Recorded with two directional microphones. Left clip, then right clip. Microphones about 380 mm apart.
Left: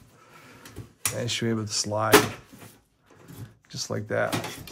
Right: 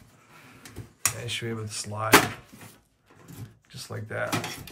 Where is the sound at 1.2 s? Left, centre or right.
Centre.